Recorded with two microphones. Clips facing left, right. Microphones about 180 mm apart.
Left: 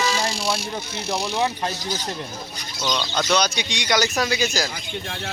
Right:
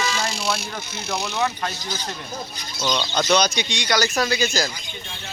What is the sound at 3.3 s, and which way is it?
Speech, 10° left (ahead or behind).